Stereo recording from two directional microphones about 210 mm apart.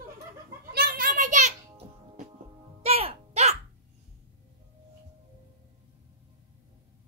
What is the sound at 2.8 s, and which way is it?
Music, 30° right (ahead or behind).